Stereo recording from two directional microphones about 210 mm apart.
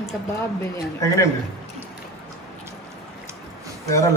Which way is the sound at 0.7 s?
15° left (ahead or behind).